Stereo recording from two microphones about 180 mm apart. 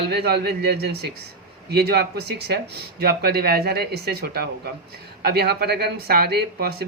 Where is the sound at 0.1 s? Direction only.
65° right (ahead or behind).